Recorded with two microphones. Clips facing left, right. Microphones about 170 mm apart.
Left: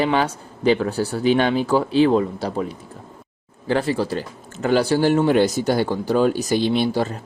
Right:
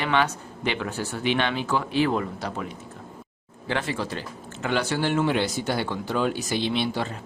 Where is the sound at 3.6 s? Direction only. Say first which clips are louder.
Left 7 dB; 35° left (ahead or behind).